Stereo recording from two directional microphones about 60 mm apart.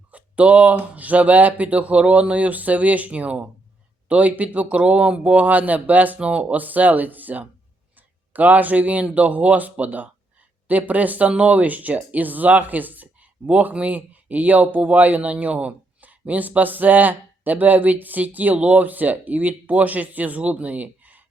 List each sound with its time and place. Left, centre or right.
0.1 s speech: right